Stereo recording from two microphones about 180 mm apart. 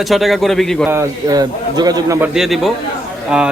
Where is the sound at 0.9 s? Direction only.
15° right (ahead or behind).